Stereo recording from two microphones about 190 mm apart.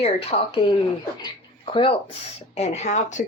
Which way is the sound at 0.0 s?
35° left (ahead or behind).